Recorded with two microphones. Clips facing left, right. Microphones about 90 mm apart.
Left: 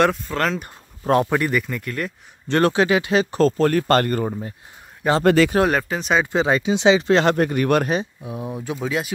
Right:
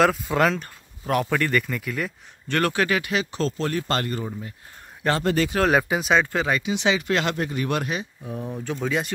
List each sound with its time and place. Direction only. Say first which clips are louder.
0.0 s speech: even; centre (ahead or behind)
1.0 s speech: left 5 dB; 30° left (ahead or behind)
1.5 s speech: left 1 dB; centre (ahead or behind)
2.4 s speech: left 5 dB; 25° left (ahead or behind)
3.3 s speech: left 8 dB; 45° left (ahead or behind)
5.2 s speech: left 10 dB; 90° left
5.7 s speech: right 1 dB; 10° right (ahead or behind)
6.2 s speech: left 5 dB; 20° left (ahead or behind)
7.3 s speech: left 7 dB; 55° left (ahead or behind)
8.2 s speech: left 2 dB; 15° left (ahead or behind)